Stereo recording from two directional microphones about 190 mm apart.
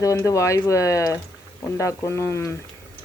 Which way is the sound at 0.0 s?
15° left (ahead or behind).